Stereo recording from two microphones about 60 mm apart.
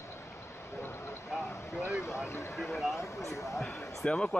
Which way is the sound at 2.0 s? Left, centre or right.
Left.